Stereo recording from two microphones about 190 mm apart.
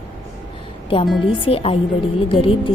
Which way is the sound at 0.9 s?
30° left (ahead or behind).